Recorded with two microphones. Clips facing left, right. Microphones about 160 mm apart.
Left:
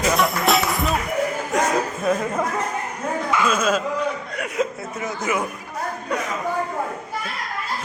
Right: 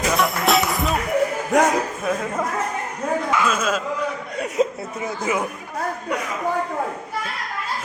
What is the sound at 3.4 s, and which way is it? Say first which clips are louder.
Speech: left 2 dB; centre (ahead or behind).